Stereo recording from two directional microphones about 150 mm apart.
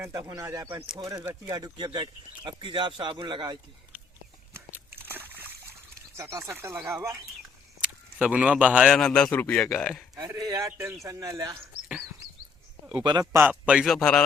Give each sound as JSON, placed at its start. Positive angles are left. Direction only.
{"t": 0.0, "sound": "speech", "side_deg": -25}
{"t": 4.9, "sound": "splash", "side_deg": -15}
{"t": 6.1, "sound": "speech", "side_deg": -20}
{"t": 8.9, "sound": "a man's voice", "side_deg": 5}
{"t": 10.2, "sound": "speech", "side_deg": -25}
{"t": 13.0, "sound": "speech", "side_deg": -30}
{"t": 13.3, "sound": "a man's voice", "side_deg": -10}